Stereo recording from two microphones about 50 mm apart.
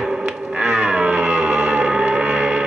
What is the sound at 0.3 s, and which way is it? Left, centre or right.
Music, centre.